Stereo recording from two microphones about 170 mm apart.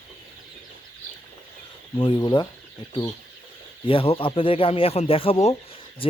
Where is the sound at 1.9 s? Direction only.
30° left (ahead or behind).